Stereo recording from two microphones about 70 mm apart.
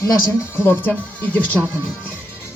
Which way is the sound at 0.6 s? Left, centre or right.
Left.